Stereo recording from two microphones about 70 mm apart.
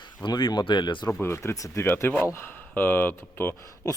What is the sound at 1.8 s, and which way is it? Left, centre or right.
Speech, left.